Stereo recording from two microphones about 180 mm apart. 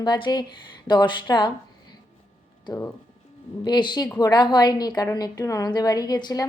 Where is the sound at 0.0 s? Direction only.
25° left (ahead or behind).